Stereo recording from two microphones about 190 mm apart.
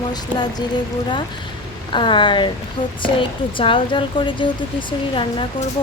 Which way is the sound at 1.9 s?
25° left (ahead or behind).